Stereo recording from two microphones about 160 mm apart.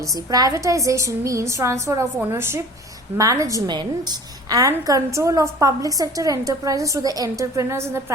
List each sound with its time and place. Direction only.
0.3 s a woman's voice: 20° right (ahead or behind)